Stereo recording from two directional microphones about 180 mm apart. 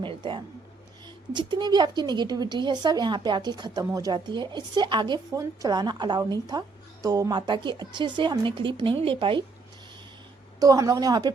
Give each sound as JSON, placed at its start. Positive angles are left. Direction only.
{"t": 0.0, "sound": "speech", "side_deg": -25}
{"t": 10.6, "sound": "speech", "side_deg": -20}